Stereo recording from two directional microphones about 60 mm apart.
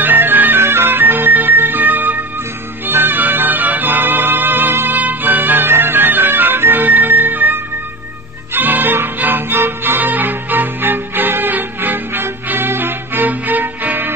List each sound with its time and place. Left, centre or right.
0.0 s music: right